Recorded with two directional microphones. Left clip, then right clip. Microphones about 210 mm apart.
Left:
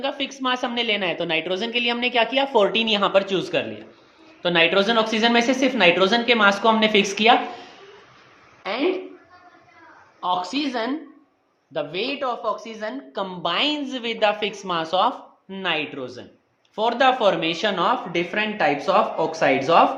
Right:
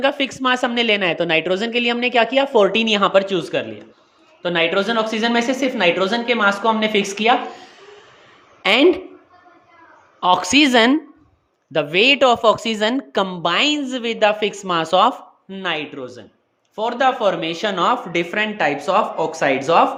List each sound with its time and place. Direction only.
0.0 s a woman's voice: 35° right (ahead or behind); by 7.8 s 15° right (ahead or behind)
10.2 s a woman's voice: 45° right (ahead or behind)
13.2 s a woman's voice: 30° right (ahead or behind)
15.4 s speech: 15° right (ahead or behind)
17.7 s speech: 25° right (ahead or behind)